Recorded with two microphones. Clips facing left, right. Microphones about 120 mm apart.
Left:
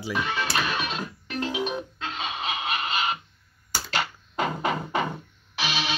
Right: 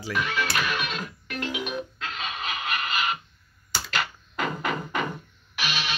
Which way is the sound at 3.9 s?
30° left (ahead or behind).